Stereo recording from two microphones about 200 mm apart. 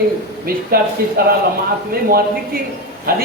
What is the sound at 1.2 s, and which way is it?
Speech, 50° right (ahead or behind).